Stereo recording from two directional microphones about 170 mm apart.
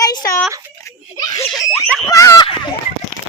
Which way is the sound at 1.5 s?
Centre (ahead or behind).